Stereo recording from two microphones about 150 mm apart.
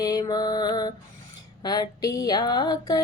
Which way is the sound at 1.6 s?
25° left (ahead or behind).